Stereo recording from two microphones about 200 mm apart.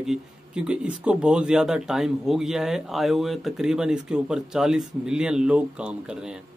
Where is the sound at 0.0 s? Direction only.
5° right (ahead or behind).